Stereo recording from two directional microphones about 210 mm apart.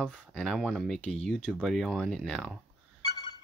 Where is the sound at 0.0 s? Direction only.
5° left (ahead or behind).